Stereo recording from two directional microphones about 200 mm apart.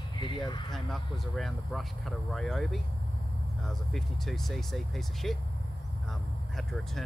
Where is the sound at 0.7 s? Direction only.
Centre (ahead or behind).